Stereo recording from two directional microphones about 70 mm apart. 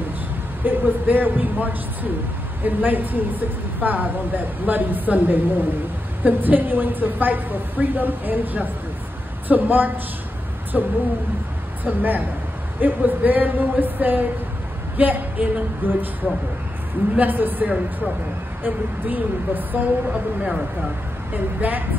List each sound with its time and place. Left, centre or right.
0.7 s speech: right
21.3 s speech: right